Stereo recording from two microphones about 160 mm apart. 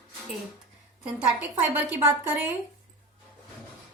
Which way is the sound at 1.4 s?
10° right (ahead or behind).